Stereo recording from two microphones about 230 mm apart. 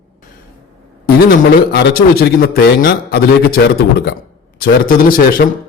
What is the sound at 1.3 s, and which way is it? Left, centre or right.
A man's voice, left.